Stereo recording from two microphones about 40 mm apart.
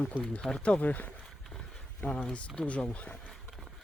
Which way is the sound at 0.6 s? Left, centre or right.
Left.